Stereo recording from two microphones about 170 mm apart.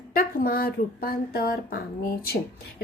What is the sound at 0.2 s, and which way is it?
A woman's voice, 60° left (ahead or behind).